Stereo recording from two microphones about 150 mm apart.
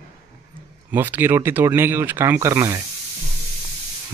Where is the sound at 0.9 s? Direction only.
15° right (ahead or behind).